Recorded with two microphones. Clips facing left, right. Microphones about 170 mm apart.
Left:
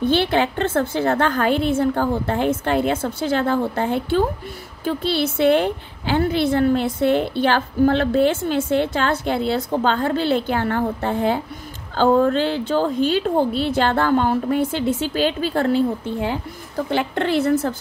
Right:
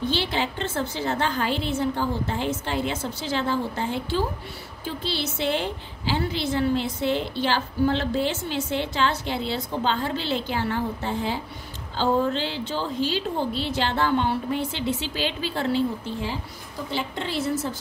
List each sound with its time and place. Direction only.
0.0 s a woman's voice: 55° left (ahead or behind)